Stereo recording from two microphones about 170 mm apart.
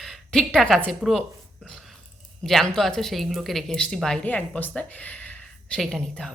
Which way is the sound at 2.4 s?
Centre (ahead or behind).